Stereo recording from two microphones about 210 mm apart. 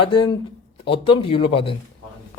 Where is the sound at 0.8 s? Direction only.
25° left (ahead or behind).